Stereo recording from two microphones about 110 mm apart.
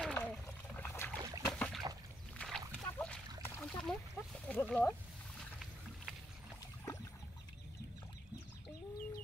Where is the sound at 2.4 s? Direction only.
10° left (ahead or behind).